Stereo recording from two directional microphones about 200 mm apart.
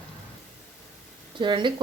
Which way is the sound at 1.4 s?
25° right (ahead or behind).